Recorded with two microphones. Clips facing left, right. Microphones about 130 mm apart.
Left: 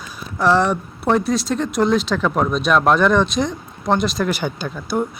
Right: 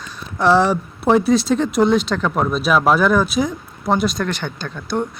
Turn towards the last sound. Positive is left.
turn(degrees=5)  # may be behind; listen again after turning